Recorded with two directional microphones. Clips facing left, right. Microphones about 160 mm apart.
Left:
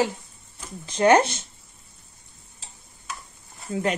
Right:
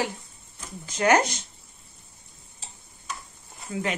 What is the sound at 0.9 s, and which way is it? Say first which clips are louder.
Speech: left 4 dB; 30° left (ahead or behind).